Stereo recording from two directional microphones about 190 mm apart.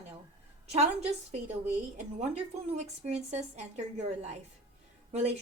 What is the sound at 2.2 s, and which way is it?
A woman's voice, 35° right (ahead or behind).